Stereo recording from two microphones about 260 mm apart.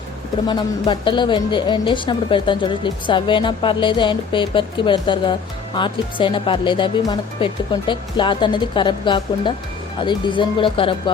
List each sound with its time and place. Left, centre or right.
0.4 s a woman's voice: centre